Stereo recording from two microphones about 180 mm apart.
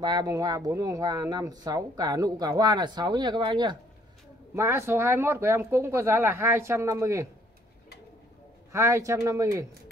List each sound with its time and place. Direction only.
0.0 s speech: 20° right (ahead or behind)
8.7 s speech: 15° right (ahead or behind)